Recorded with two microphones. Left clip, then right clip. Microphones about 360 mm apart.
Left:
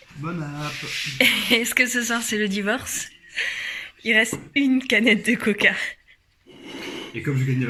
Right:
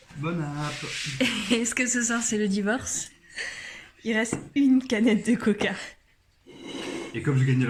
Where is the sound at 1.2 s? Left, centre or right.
Centre.